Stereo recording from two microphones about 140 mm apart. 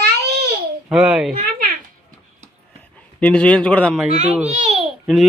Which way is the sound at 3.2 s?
10° left (ahead or behind).